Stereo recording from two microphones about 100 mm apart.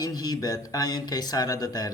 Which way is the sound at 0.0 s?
40° left (ahead or behind).